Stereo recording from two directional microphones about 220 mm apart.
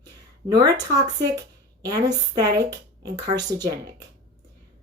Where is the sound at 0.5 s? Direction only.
20° right (ahead or behind).